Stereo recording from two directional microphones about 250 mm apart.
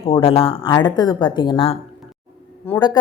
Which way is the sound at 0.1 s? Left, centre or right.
Left.